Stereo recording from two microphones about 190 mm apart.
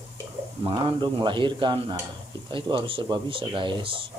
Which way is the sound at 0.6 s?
25° right (ahead or behind).